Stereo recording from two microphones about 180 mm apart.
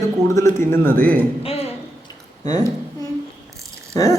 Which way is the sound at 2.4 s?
20° left (ahead or behind).